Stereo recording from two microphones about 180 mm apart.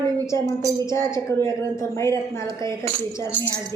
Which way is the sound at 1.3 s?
15° left (ahead or behind).